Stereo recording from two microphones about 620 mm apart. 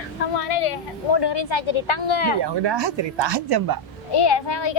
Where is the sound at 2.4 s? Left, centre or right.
Right.